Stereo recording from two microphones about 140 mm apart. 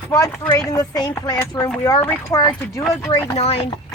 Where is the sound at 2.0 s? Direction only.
15° left (ahead or behind).